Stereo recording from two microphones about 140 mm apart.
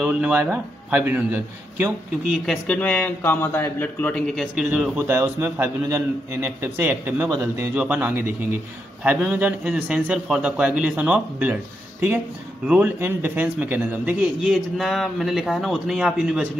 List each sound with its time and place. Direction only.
0.0 s a man's voice: 10° right (ahead or behind)
2.3 s speech: centre (ahead or behind)
4.9 s a man's voice: 15° right (ahead or behind)
7.2 s a man's voice: 25° right (ahead or behind)
7.7 s a man's voice: 10° right (ahead or behind)
12.6 s a man's voice: 10° right (ahead or behind)